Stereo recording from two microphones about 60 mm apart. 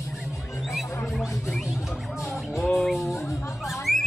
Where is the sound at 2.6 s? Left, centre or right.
Centre.